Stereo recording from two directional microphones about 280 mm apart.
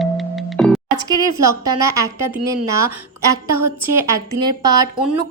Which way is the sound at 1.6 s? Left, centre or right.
Centre.